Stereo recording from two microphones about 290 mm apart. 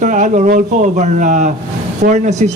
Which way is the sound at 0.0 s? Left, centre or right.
Right.